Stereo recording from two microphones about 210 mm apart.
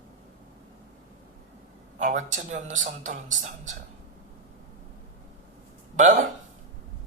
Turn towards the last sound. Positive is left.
turn(degrees=-35)  # may be behind; listen again after turning